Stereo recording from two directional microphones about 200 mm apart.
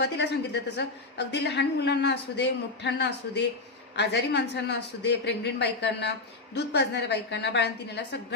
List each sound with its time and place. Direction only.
0.0 s a woman's voice: 60° left (ahead or behind)